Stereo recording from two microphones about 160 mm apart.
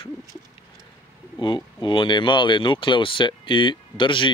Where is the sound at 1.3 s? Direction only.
30° left (ahead or behind).